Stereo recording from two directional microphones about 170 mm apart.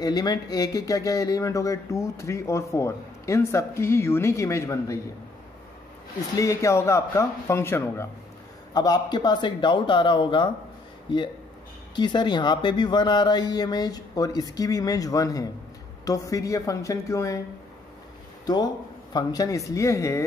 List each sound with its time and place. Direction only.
0.0 s speech: 20° left (ahead or behind)
6.3 s speech: 20° left (ahead or behind)
11.9 s speech: 25° left (ahead or behind)
19.1 s speech: 20° left (ahead or behind)